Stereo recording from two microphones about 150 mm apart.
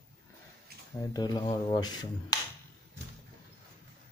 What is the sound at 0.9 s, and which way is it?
Speech, 25° left (ahead or behind).